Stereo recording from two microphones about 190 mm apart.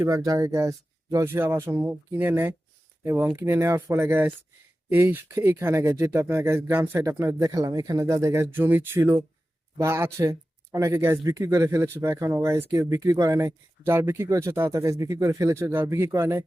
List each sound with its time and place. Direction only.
0.0 s speech: 15° right (ahead or behind)